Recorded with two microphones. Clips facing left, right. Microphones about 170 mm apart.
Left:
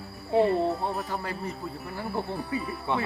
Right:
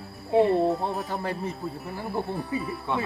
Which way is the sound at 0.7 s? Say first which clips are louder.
Right 2 dB; centre (ahead or behind).